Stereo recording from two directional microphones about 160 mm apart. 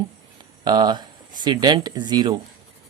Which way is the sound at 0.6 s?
25° right (ahead or behind).